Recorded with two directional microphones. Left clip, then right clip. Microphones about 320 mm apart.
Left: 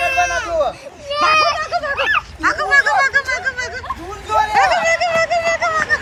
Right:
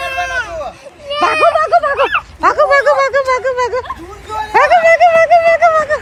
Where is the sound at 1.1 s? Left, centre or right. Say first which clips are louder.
Right 3 dB; centre.